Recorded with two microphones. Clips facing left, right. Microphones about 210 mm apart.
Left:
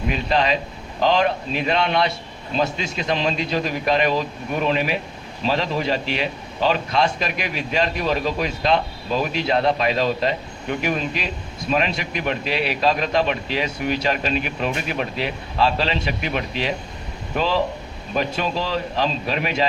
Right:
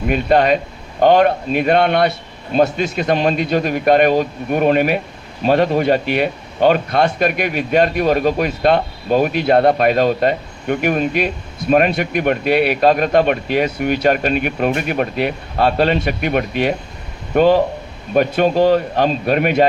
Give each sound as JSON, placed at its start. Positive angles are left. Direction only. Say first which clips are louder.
{"t": 0.1, "sound": "speech", "louder": "right 8 dB", "side_deg": -55}